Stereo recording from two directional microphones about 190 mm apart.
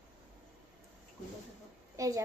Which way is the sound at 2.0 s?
15° right (ahead or behind).